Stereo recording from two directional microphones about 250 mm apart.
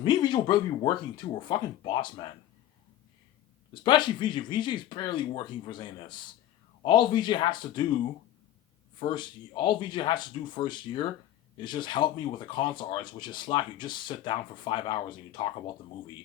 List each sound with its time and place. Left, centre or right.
0.0 s speech: centre
3.8 s speech: centre
9.0 s speech: centre